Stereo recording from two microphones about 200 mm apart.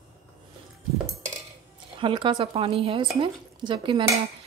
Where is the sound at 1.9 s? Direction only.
25° right (ahead or behind).